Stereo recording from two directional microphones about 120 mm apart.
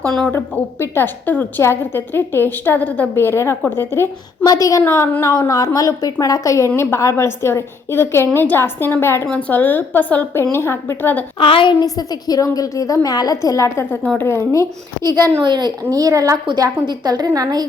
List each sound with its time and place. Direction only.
0.0 s a woman's voice: 5° left (ahead or behind)
0.3 s a woman's voice: 20° left (ahead or behind)
9.2 s a woman's voice: 10° left (ahead or behind)
11.3 s a woman's voice: 45° left (ahead or behind); by 14.0 s 25° left (ahead or behind)
14.0 s a woman's voice: 10° left (ahead or behind)
14.3 s a woman's voice: 25° left (ahead or behind)
15.3 s a woman's voice: 45° right (ahead or behind); by 16.4 s 30° right (ahead or behind)
16.5 s a woman's voice: 40° right (ahead or behind)